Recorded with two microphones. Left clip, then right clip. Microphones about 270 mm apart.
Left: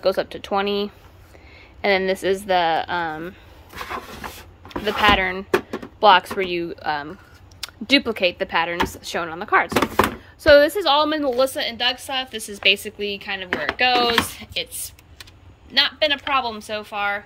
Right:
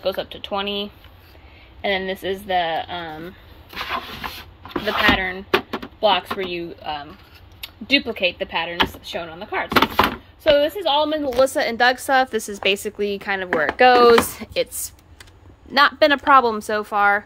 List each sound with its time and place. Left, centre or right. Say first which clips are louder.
0.2 s speech: left 3 dB; left
1.8 s speech: left 3 dB; centre
11.4 s a woman's voice: right 4 dB; centre
15.7 s a woman's voice: right 4 dB; centre